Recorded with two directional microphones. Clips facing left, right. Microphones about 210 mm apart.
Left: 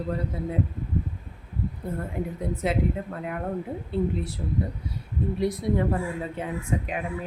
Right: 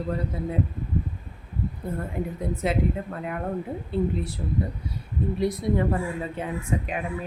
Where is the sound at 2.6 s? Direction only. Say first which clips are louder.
Right 1 dB; 10° left (ahead or behind).